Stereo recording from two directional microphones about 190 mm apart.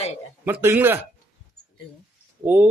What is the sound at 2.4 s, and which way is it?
Speech, 10° right (ahead or behind).